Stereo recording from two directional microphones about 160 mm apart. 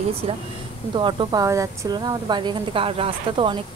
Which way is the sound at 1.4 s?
20° right (ahead or behind).